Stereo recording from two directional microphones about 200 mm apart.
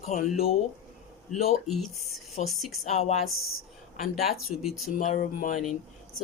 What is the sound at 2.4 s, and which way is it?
Speech, centre (ahead or behind).